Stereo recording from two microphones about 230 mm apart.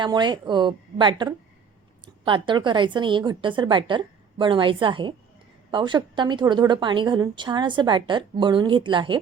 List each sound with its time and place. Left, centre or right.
0.0 s a woman's voice: centre